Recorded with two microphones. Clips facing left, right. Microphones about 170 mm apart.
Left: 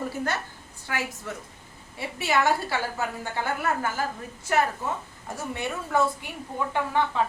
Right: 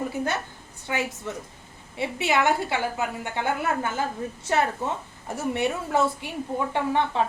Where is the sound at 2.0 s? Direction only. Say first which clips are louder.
Right 2 dB; 20° right (ahead or behind).